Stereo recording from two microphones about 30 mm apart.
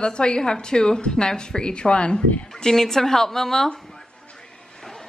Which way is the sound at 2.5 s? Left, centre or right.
Centre.